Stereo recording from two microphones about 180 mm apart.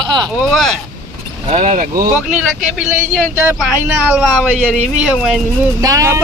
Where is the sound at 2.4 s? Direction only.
Centre (ahead or behind).